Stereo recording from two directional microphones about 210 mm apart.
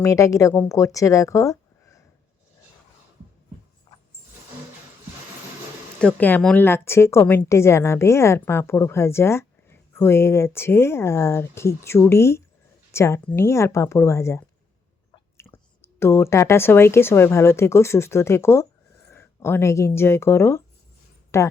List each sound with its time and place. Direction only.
0.0 s a woman's voice: 15° left (ahead or behind)
3.9 s music: 20° left (ahead or behind)
6.0 s a woman's voice: 5° left (ahead or behind)